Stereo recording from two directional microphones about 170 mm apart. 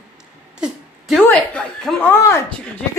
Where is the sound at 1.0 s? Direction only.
5° left (ahead or behind).